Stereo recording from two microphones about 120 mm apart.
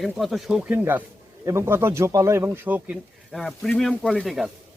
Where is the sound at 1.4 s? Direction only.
25° right (ahead or behind).